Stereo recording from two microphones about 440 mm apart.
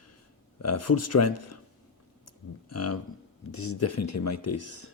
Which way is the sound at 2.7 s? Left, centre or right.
Left.